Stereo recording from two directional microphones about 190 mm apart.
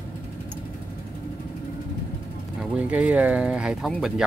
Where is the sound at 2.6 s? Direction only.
5° right (ahead or behind).